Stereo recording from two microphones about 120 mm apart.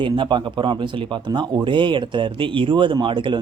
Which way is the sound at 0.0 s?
40° right (ahead or behind).